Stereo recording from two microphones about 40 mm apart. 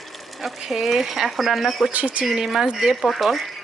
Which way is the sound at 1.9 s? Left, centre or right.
Right.